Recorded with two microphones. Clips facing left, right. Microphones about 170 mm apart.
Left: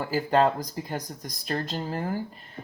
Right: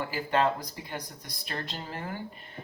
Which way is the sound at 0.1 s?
40° left (ahead or behind).